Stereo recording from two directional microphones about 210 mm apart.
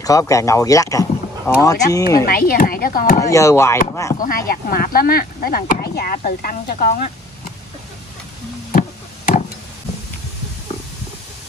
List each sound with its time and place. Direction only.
0.0 s speech: 15° left (ahead or behind)
2.2 s speech: 45° left (ahead or behind)
3.2 s speech: 15° left (ahead or behind)
4.5 s speech: 45° left (ahead or behind)
8.7 s a sound: 40° left (ahead or behind)